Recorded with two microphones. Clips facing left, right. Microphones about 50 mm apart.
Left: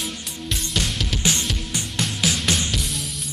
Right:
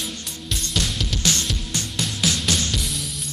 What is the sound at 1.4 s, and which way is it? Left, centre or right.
Music, centre.